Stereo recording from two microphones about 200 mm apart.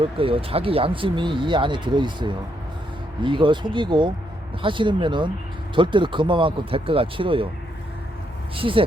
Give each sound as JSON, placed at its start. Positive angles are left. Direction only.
{"t": 0.0, "sound": "speech", "side_deg": -25}
{"t": 8.5, "sound": "speech", "side_deg": -25}